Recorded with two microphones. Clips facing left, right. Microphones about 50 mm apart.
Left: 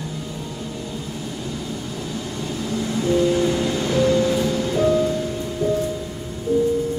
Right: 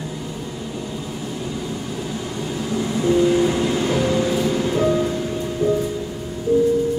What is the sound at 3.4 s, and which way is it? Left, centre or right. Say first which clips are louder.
Music: right 2 dB; centre.